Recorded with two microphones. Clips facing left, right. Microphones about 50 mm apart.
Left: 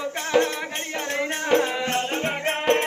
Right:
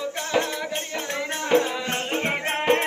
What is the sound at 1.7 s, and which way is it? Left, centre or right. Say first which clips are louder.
Music: left 2 dB; centre.